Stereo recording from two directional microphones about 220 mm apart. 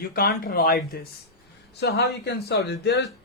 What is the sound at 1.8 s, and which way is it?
Speech, 45° left (ahead or behind).